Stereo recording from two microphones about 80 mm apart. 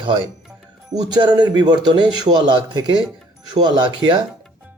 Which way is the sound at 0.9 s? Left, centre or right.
Right.